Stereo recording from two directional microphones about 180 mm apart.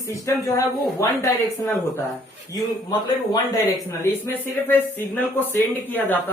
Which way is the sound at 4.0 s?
10° left (ahead or behind).